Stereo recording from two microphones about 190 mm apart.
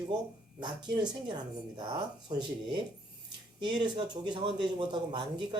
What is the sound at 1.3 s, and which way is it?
Speech, 20° right (ahead or behind).